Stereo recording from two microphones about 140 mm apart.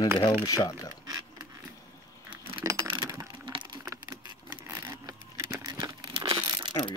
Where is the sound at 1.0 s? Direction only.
25° right (ahead or behind).